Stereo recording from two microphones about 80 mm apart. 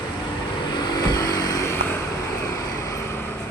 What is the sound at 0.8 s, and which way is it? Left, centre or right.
Vehicle, left.